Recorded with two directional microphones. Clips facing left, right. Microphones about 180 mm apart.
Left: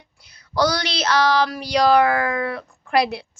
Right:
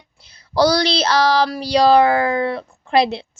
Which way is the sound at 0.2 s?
30° right (ahead or behind).